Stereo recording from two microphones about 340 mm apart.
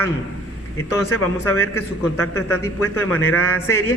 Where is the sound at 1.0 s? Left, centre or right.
Left.